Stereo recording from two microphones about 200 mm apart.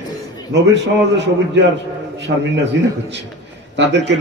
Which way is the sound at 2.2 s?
60° right (ahead or behind).